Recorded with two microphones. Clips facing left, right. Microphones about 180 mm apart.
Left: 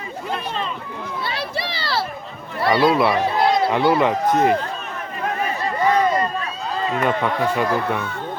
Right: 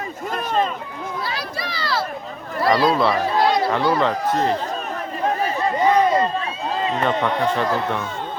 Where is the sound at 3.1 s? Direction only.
20° left (ahead or behind).